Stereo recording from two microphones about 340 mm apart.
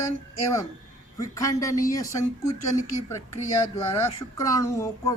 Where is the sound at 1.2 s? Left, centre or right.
Centre.